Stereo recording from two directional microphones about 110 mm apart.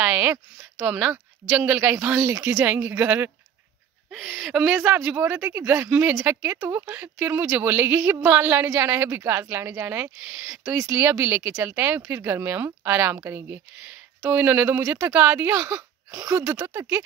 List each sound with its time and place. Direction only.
0.0 s a sound: 15° right (ahead or behind)
0.8 s speech: 10° right (ahead or behind)
4.1 s speech: centre (ahead or behind)
4.7 s speech: 15° right (ahead or behind)
14.8 s speech: 30° right (ahead or behind)
15.1 s speech: 20° right (ahead or behind)